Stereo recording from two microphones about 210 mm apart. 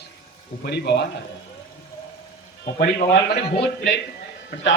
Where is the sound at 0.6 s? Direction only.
50° left (ahead or behind).